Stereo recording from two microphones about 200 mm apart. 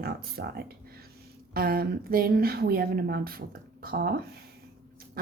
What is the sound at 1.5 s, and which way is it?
Speech, 50° right (ahead or behind).